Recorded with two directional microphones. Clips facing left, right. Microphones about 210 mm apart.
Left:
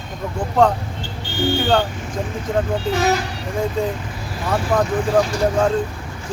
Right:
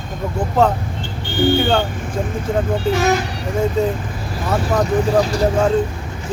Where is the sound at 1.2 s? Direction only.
55° right (ahead or behind).